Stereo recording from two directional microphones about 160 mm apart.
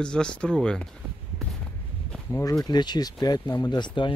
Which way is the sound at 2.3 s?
20° left (ahead or behind).